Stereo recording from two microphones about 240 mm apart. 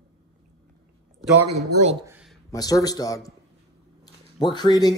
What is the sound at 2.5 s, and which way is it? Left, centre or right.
A man's voice, centre.